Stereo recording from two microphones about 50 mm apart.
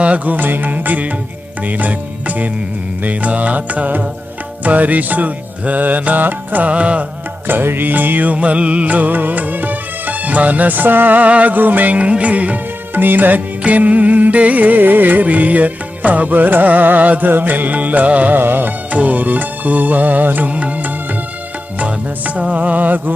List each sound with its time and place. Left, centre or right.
0.0 s music: right
0.3 s music: right
7.4 s music: right
18.3 s music: right
18.9 s music: right
22.4 s music: right